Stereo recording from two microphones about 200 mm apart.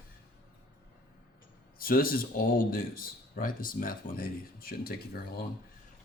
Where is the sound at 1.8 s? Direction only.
45° left (ahead or behind).